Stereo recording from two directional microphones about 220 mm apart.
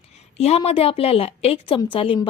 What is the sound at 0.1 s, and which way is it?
A woman's voice, 30° left (ahead or behind).